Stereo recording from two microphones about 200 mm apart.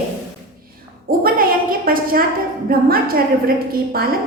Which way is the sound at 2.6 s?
50° right (ahead or behind).